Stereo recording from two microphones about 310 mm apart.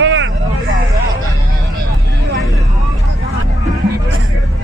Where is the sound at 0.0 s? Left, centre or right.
Right.